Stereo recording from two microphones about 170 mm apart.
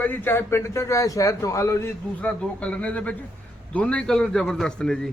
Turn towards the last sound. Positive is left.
turn(degrees=5)  # may be behind; listen again after turning